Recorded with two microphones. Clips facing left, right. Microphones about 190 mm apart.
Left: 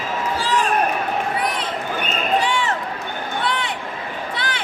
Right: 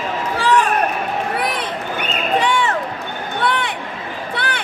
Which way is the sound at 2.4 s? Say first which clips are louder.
Right 3 dB; 60° right (ahead or behind).